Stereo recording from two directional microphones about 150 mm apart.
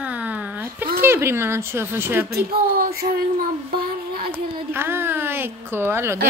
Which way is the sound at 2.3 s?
90° right.